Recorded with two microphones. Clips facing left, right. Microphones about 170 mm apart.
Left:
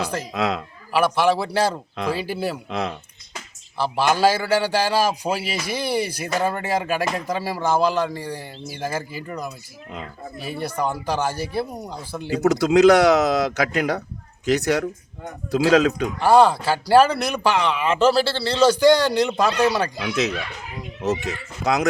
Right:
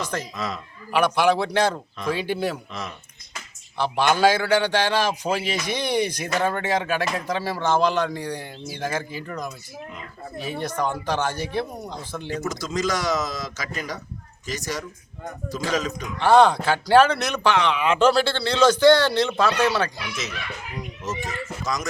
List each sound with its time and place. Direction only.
0.0 s speech: 10° left (ahead or behind)
0.3 s speech: 65° left (ahead or behind)
0.9 s a man's voice: centre (ahead or behind)
2.6 s speech: 65° left (ahead or behind)
3.8 s speech: 5° left (ahead or behind)
12.4 s speech: 65° left (ahead or behind)
16.1 s speech: 10° left (ahead or behind)
20.0 s speech: 65° left (ahead or behind)